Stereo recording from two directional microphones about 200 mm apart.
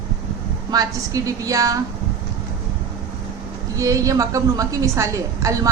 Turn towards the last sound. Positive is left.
turn(degrees=-15)  # may be behind; listen again after turning